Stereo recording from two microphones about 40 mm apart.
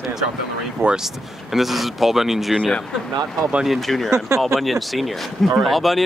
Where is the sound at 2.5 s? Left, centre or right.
Left.